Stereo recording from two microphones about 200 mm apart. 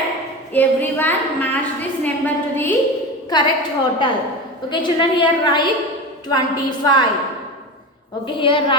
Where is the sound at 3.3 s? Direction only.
20° left (ahead or behind).